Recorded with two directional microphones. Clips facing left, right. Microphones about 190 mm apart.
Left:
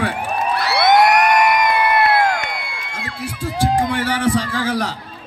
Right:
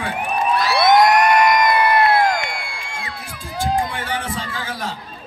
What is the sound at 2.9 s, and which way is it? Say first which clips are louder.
Music: left 8 dB; 70° left (ahead or behind).